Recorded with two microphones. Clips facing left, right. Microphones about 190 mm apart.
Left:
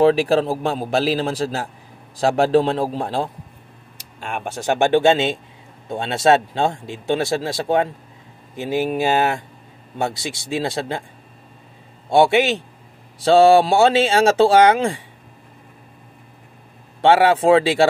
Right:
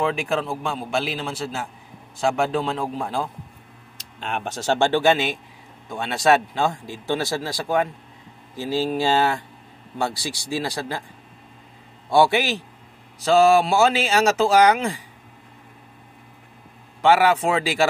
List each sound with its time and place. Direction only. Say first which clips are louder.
0.0 s a man's voice: left 8 dB; 35° left (ahead or behind)
4.0 s speech: left 1 dB; 10° left (ahead or behind)
12.1 s speech: left 3 dB; 25° left (ahead or behind)
17.0 s speech: left 3 dB; 30° left (ahead or behind)